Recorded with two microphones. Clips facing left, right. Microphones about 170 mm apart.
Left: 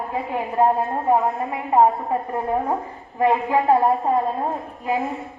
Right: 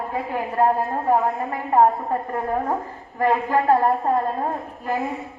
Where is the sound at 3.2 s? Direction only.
15° left (ahead or behind).